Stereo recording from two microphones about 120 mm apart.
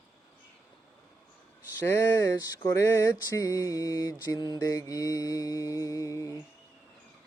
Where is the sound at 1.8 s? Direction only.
20° left (ahead or behind).